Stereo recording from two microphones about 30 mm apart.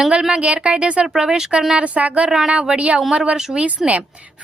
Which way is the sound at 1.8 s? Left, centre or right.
Right.